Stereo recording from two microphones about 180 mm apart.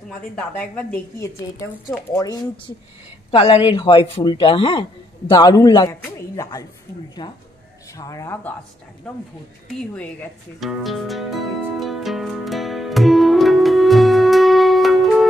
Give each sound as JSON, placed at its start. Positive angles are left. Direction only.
{"t": 0.4, "sound": "a woman's voice", "side_deg": 5}
{"t": 3.3, "sound": "a woman's voice", "side_deg": 30}
{"t": 9.8, "sound": "music", "side_deg": 10}